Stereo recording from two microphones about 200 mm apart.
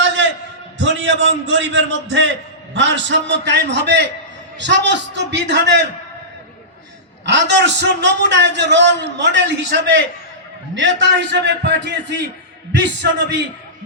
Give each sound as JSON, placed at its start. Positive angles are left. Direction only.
{"t": 0.2, "sound": "a sound", "side_deg": -65}
{"t": 0.8, "sound": "a man's voice", "side_deg": -65}
{"t": 7.3, "sound": "a man's voice", "side_deg": -60}